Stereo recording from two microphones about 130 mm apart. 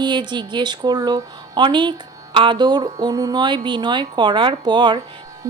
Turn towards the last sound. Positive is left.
turn(degrees=-35)  # may be behind; listen again after turning